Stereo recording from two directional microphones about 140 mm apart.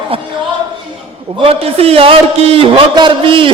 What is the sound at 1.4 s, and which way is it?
A man's voice, 45° right (ahead or behind).